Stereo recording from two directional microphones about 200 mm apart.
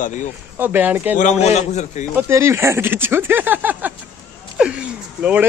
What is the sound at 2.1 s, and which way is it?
Speech, 15° right (ahead or behind).